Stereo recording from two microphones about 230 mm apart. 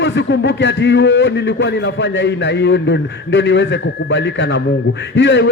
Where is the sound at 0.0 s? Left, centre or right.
Left.